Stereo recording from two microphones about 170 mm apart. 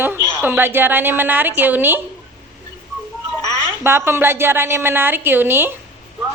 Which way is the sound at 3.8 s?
15° right (ahead or behind).